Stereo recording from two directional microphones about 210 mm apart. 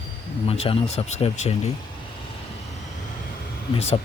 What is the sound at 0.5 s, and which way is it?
Speech, 30° left (ahead or behind).